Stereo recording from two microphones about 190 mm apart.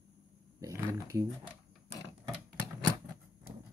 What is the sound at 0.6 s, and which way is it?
Speech, 15° right (ahead or behind).